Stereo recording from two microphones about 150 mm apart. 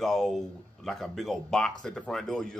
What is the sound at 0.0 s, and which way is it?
Speech, centre (ahead or behind).